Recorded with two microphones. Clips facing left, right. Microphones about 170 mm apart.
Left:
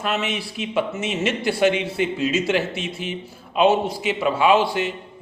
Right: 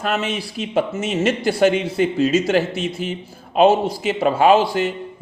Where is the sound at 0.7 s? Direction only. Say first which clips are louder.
Right 3 dB; 45° right (ahead or behind).